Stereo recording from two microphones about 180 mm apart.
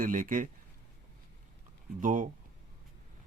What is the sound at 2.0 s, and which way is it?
Speech, 45° right (ahead or behind).